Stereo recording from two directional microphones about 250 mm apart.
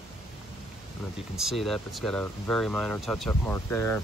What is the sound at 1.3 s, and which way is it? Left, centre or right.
Speech, centre.